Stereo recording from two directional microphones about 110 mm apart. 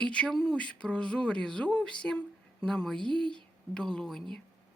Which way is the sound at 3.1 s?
45° right (ahead or behind).